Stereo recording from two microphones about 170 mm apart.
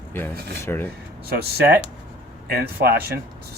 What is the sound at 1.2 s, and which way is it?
Speech, 65° right (ahead or behind).